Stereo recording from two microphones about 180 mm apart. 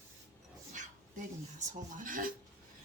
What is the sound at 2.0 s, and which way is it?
Speech, 50° right (ahead or behind).